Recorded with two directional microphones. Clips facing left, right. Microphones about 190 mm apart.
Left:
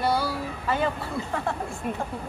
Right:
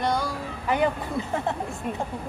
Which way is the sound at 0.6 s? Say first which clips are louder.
Right 3 dB; 15° right (ahead or behind).